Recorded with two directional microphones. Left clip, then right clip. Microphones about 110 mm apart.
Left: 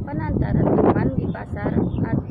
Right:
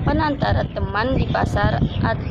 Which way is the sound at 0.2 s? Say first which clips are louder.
Right 4 dB; 15° left (ahead or behind).